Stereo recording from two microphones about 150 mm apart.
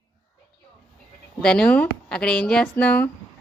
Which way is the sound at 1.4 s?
5° left (ahead or behind).